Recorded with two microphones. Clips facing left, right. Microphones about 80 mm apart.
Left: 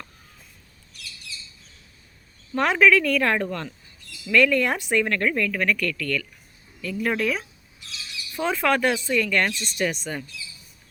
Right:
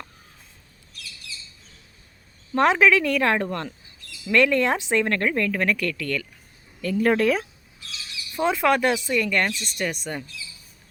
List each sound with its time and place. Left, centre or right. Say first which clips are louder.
2.6 s speech: right 1 dB; right
6.8 s speech: right 5 dB; right
8.4 s speech: right 2 dB; centre